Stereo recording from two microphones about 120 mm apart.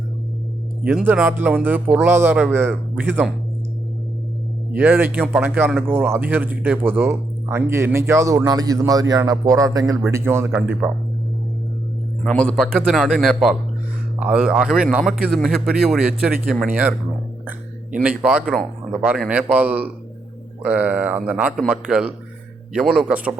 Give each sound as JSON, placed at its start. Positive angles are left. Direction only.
{"t": 1.0, "sound": "mantra", "side_deg": -15}
{"t": 1.6, "sound": "speech", "side_deg": -15}
{"t": 4.7, "sound": "speech", "side_deg": -15}
{"t": 12.3, "sound": "a man's voice", "side_deg": 10}
{"t": 12.6, "sound": "a man's voice", "side_deg": -5}
{"t": 16.6, "sound": "mantra", "side_deg": -15}
{"t": 17.9, "sound": "mantra", "side_deg": -10}